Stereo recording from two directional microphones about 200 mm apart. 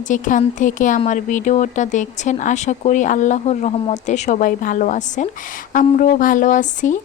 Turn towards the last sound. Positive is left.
turn(degrees=40)  # may be behind; listen again after turning